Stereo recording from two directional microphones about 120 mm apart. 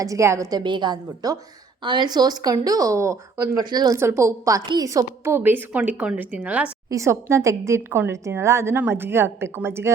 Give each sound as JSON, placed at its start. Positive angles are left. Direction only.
{"t": 0.0, "sound": "a woman's voice", "side_deg": -25}
{"t": 0.6, "sound": "a woman's voice", "side_deg": -40}
{"t": 3.6, "sound": "a woman's voice", "side_deg": -35}
{"t": 3.9, "sound": "a woman's voice", "side_deg": -20}
{"t": 6.9, "sound": "a woman's voice", "side_deg": -25}